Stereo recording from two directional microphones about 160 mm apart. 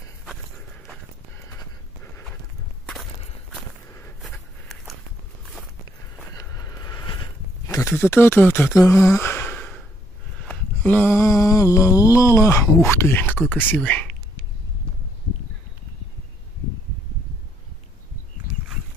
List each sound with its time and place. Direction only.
4.2 s a sound: centre (ahead or behind)
5.4 s walk: centre (ahead or behind)
6.3 s vehicle: 20° left (ahead or behind)
7.6 s speech: 15° left (ahead or behind)
10.4 s mantra: 5° left (ahead or behind)